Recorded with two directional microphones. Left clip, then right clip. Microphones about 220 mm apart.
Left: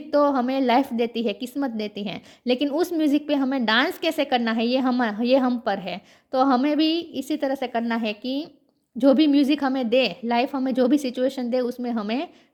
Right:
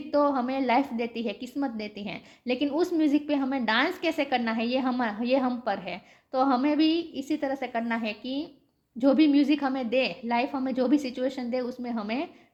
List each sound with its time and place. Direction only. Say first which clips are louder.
0.1 s a woman's voice: left 5 dB; 40° left (ahead or behind)